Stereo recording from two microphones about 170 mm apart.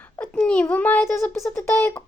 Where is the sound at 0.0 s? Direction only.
10° left (ahead or behind).